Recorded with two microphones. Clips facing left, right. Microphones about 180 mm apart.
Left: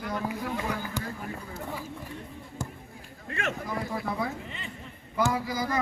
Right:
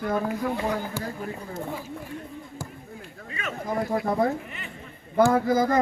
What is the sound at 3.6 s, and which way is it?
A man's voice, 45° right (ahead or behind).